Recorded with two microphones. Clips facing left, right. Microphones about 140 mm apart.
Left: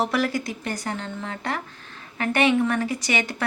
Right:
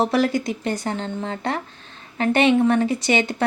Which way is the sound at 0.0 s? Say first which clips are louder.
Right 4 dB; 25° right (ahead or behind).